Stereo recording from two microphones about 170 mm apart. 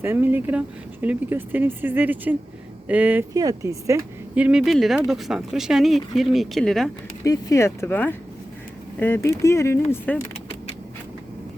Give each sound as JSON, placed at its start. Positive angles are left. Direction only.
{"t": 0.0, "sound": "speech", "side_deg": -10}
{"t": 3.3, "sound": "speech", "side_deg": -20}
{"t": 7.3, "sound": "speech", "side_deg": 20}